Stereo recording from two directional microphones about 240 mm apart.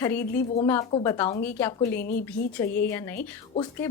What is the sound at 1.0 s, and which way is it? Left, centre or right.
Speech, centre.